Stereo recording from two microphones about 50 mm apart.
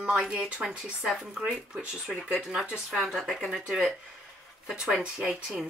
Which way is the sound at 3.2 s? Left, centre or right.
Centre.